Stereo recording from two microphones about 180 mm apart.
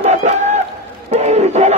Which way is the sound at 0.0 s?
40° right (ahead or behind).